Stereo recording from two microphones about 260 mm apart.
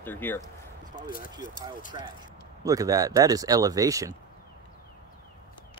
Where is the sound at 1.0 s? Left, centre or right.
Left.